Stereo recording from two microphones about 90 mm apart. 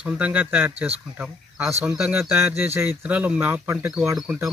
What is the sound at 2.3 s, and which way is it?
Speech, 25° right (ahead or behind).